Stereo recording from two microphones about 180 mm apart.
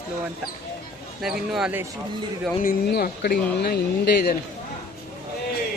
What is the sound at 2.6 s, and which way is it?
Speech, 55° left (ahead or behind).